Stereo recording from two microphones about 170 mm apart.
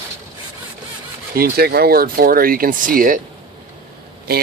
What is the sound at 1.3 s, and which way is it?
Speech, 65° right (ahead or behind).